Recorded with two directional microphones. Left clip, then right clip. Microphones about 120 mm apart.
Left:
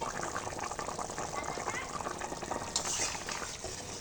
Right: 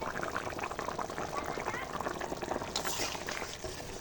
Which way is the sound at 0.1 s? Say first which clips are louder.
Right 1 dB; 20° right (ahead or behind).